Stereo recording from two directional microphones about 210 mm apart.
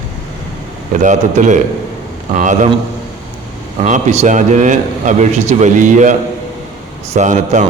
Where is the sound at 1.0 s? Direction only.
35° right (ahead or behind).